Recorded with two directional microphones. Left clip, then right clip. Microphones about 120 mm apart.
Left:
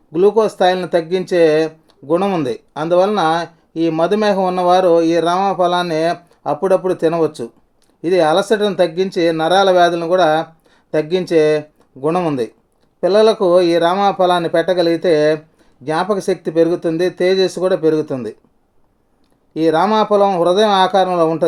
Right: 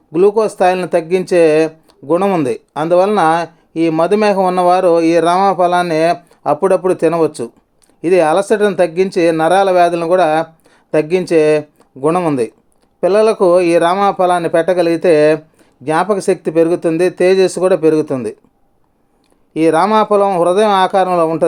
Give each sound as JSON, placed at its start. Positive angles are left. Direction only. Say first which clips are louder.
{"t": 0.1, "sound": "speech", "louder": "right 1 dB", "side_deg": -35}
{"t": 19.5, "sound": "speech", "louder": "right 3 dB", "side_deg": -35}